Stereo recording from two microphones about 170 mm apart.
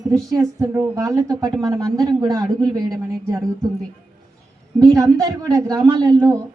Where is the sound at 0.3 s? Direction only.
20° right (ahead or behind).